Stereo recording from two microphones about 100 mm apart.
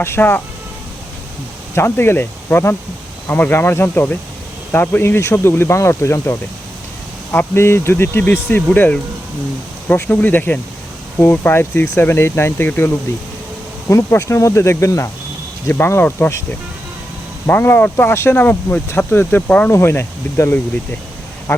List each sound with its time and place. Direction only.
0.0 s speech: 20° left (ahead or behind)
1.7 s speech: 25° left (ahead or behind)
17.4 s speech: 20° left (ahead or behind)
19.7 s speech: 25° left (ahead or behind)